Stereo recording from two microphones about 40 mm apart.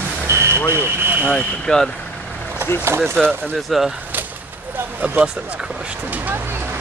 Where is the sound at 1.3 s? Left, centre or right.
Centre.